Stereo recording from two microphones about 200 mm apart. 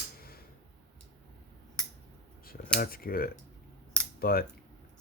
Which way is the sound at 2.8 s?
50° left (ahead or behind).